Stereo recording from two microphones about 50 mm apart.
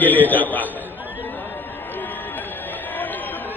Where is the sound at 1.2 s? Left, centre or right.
Left.